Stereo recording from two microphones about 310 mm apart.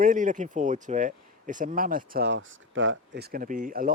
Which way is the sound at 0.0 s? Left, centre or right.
Right.